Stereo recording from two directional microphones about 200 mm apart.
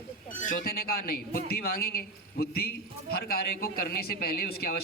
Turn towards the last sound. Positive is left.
turn(degrees=50)  # may be behind; listen again after turning